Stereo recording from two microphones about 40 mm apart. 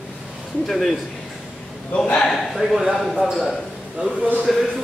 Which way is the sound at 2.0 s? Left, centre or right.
Left.